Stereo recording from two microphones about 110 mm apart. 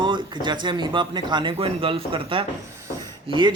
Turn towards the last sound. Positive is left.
turn(degrees=-45)  # may be behind; listen again after turning